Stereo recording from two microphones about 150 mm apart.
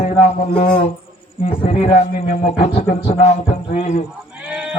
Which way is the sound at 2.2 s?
65° left (ahead or behind).